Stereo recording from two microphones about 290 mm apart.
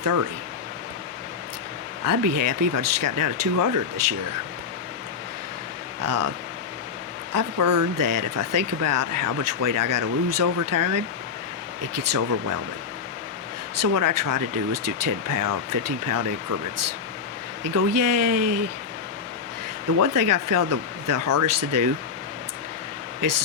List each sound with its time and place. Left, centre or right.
2.0 s speech: right
6.0 s speech: right
7.3 s speech: right
13.7 s speech: right
17.7 s speech: right
20.0 s speech: right
23.2 s speech: right